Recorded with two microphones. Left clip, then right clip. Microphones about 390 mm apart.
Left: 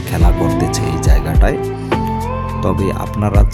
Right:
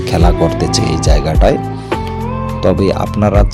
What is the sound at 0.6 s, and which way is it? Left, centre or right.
Music, left.